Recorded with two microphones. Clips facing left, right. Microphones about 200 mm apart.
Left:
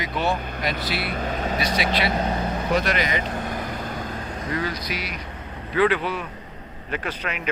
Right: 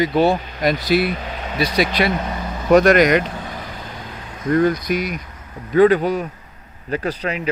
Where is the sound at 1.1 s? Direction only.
45° left (ahead or behind).